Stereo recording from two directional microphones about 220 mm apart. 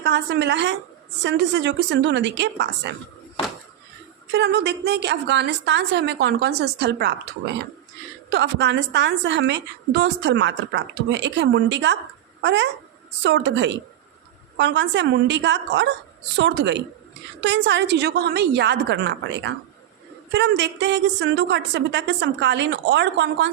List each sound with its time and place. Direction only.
0.0 s a woman's voice: 50° right (ahead or behind)
4.3 s a woman's voice: 50° right (ahead or behind)
8.3 s a woman's voice: 50° right (ahead or behind)